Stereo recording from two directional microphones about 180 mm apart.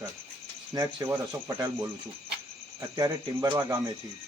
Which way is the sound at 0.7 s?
20° right (ahead or behind).